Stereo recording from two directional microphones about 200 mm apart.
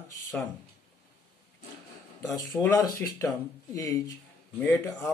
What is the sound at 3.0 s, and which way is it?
Speech, 10° left (ahead or behind).